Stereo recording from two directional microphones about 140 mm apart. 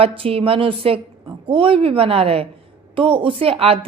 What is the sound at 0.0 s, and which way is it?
A woman's voice, 40° right (ahead or behind).